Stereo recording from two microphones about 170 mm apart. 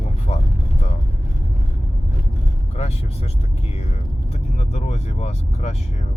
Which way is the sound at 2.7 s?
40° left (ahead or behind).